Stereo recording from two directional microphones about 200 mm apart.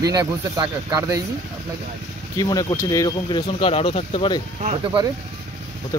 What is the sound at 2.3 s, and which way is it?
Speech, 15° left (ahead or behind).